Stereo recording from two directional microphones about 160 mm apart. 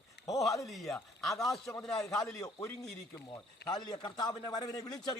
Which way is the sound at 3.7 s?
25° left (ahead or behind).